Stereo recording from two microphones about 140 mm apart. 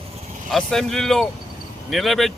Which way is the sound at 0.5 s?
Centre (ahead or behind).